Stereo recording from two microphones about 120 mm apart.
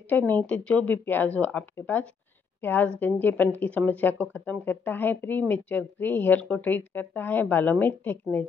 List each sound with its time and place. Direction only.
0.1 s speech: 15° left (ahead or behind)